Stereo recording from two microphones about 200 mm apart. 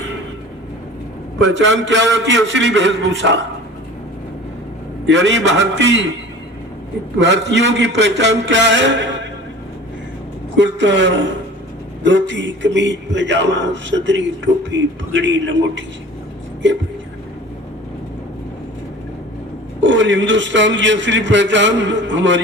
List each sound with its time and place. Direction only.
1.4 s a man's voice: 65° right (ahead or behind)
5.0 s a man's voice: 65° right (ahead or behind)
7.2 s a man's voice: 65° right (ahead or behind)
10.6 s a man's voice: 65° right (ahead or behind)
19.8 s a man's voice: 65° right (ahead or behind)